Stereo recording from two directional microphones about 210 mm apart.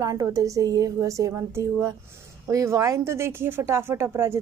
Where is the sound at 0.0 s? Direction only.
15° right (ahead or behind).